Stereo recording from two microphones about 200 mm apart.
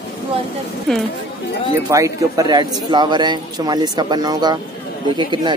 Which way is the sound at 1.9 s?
15° right (ahead or behind).